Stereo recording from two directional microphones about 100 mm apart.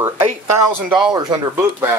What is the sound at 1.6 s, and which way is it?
Speech, 25° right (ahead or behind).